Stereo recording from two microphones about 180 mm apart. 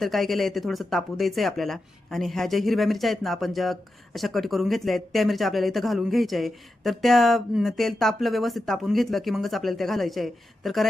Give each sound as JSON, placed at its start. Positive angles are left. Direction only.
{"t": 0.0, "sound": "speech", "side_deg": 0}